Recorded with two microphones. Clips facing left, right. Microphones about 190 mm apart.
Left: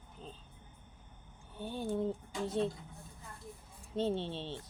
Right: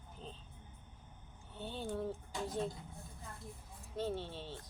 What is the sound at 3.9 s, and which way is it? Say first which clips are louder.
Speech: left 5 dB; 25° left (ahead or behind).